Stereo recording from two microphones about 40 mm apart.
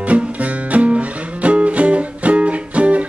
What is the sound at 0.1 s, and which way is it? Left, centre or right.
Music, right.